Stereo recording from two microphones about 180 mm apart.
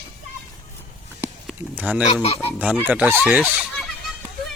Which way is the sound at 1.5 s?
10° right (ahead or behind).